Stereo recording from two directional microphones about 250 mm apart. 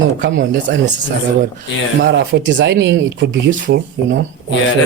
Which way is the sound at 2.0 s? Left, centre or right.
Right.